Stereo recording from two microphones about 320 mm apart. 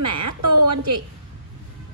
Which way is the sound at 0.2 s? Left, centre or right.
Right.